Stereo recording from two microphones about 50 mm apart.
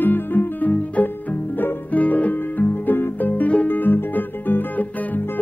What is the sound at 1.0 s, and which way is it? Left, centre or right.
Music, left.